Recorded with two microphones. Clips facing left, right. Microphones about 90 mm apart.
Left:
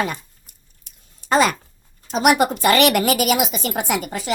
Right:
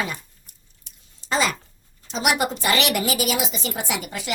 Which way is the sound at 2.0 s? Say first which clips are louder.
Left 6 dB; 50° left (ahead or behind).